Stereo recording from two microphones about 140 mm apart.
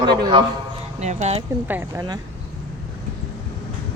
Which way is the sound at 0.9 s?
55° right (ahead or behind).